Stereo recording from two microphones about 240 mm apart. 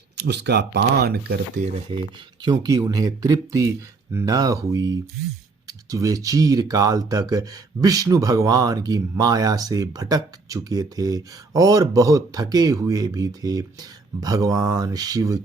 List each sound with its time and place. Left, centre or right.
0.2 s speech: right
1.6 s speech: right
2.4 s speech: centre